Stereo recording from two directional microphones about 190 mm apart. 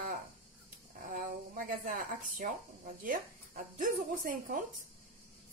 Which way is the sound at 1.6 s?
45° right (ahead or behind).